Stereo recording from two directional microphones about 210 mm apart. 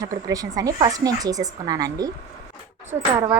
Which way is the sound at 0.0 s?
15° right (ahead or behind).